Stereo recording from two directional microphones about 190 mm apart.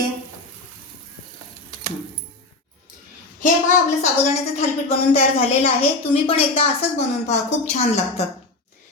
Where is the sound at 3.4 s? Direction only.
40° left (ahead or behind).